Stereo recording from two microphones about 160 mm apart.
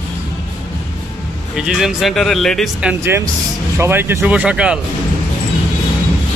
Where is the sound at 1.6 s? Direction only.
5° right (ahead or behind).